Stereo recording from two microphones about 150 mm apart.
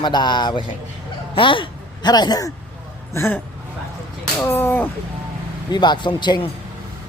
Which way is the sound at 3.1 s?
15° left (ahead or behind).